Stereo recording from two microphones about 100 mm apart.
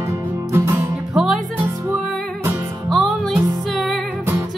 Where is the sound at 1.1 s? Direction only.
5° right (ahead or behind).